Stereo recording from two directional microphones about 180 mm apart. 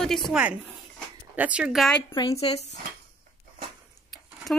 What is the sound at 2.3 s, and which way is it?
Speech, 35° left (ahead or behind).